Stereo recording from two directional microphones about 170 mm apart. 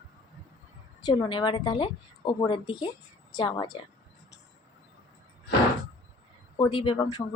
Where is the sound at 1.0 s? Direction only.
30° left (ahead or behind).